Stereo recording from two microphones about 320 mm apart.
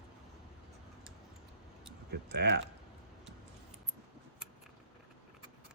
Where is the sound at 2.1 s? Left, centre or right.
Right.